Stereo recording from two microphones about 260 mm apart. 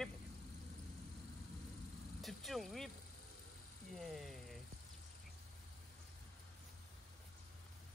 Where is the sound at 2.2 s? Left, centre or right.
Centre.